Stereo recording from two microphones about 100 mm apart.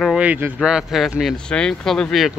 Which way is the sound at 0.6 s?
5° right (ahead or behind).